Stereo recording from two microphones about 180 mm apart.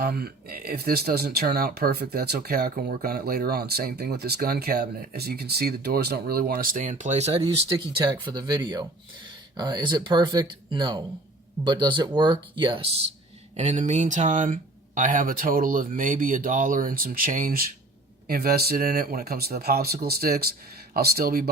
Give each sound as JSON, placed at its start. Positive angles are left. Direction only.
{"t": 0.0, "sound": "speech", "side_deg": -55}
{"t": 13.6, "sound": "speech", "side_deg": -40}